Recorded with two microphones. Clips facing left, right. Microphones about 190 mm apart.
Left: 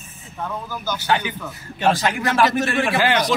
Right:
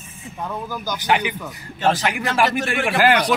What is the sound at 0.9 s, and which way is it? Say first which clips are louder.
Speech: right 1 dB; 15° right (ahead or behind).